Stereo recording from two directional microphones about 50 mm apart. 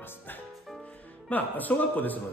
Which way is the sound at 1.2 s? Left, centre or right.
Left.